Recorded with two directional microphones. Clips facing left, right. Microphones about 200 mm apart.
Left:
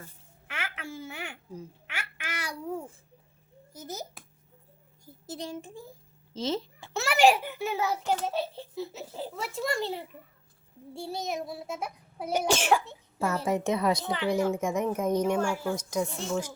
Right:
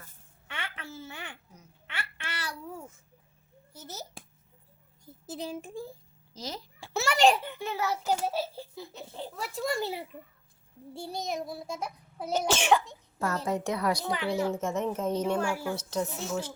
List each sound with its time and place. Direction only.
0.5 s babbling: 10° left (ahead or behind)
3.8 s a child's voice: 15° left (ahead or behind)
5.3 s a child's voice: 5° right (ahead or behind)
6.3 s a woman's voice: 25° left (ahead or behind)
6.9 s a child's voice: 5° left (ahead or behind)
8.0 s a child's voice: 5° right (ahead or behind); by 15.2 s 15° left (ahead or behind)
15.4 s a child's voice: 10° right (ahead or behind)
15.7 s a child's voice: 10° left (ahead or behind)
16.0 s a child's voice: 5° right (ahead or behind)